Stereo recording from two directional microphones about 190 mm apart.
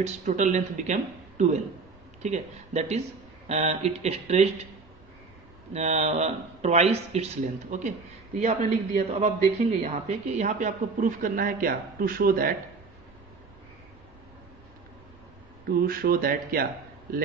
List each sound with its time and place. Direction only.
0.0 s a man's voice: 40° right (ahead or behind)
5.7 s a man's voice: 35° right (ahead or behind)
15.6 s speech: 50° right (ahead or behind)